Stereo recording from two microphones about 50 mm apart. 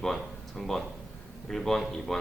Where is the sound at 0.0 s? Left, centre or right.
Centre.